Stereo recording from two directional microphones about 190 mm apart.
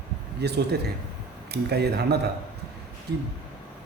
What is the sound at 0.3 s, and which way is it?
Speech, 60° right (ahead or behind).